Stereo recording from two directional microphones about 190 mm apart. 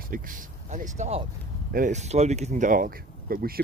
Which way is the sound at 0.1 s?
45° right (ahead or behind).